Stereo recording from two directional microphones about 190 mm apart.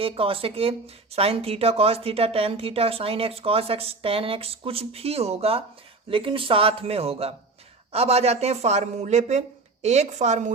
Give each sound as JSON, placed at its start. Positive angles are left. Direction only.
{"t": 0.0, "sound": "a man's voice", "side_deg": -30}